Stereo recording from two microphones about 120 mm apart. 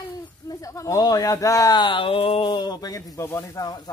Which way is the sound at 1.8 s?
45° left (ahead or behind).